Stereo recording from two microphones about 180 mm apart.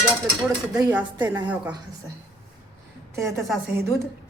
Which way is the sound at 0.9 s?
10° right (ahead or behind).